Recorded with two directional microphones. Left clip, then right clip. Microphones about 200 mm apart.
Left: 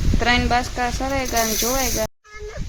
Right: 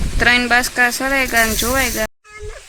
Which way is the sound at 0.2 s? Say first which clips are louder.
Right 6 dB; 10° right (ahead or behind).